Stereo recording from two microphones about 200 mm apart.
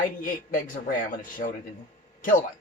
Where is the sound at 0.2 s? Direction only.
45° left (ahead or behind).